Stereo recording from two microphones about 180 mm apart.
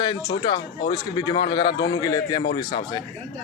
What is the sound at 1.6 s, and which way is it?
Speech, 60° left (ahead or behind).